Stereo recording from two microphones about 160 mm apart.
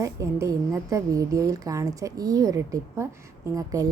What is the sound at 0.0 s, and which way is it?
Speech, 20° right (ahead or behind).